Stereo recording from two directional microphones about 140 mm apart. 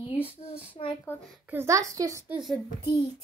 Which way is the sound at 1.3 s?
10° right (ahead or behind).